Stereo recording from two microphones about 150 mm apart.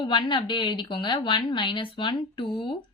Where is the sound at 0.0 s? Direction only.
30° left (ahead or behind).